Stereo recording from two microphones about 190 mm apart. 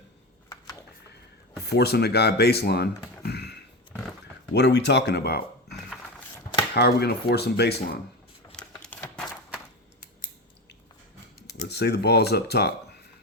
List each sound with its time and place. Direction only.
1.6 s speech: 60° left (ahead or behind)
3.3 s a sound: 60° left (ahead or behind)
4.5 s speech: 60° left (ahead or behind)
5.7 s coin: 5° left (ahead or behind)
6.7 s speech: 55° left (ahead or behind)
8.5 s typewriter: 5° left (ahead or behind)
11.7 s speech: 60° left (ahead or behind)